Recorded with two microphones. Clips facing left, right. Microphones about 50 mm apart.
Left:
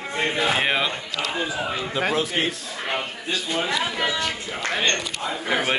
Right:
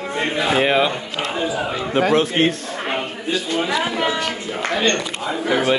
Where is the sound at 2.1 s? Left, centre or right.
Right.